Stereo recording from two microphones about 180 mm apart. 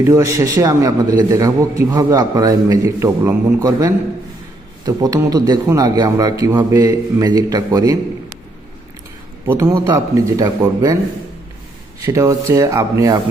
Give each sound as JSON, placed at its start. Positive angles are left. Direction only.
{"t": 0.0, "sound": "a man's voice", "side_deg": -15}
{"t": 9.5, "sound": "speech", "side_deg": -15}
{"t": 12.0, "sound": "speech", "side_deg": -15}